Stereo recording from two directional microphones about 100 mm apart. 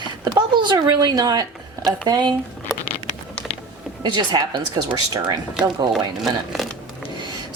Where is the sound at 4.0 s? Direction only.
45° right (ahead or behind).